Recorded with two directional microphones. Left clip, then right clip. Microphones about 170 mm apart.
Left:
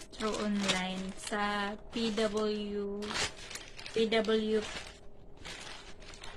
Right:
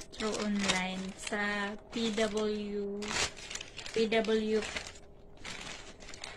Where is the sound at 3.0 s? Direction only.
45° right (ahead or behind).